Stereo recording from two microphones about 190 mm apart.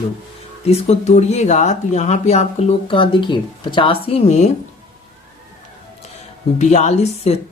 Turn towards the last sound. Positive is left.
turn(degrees=35)  # may be behind; listen again after turning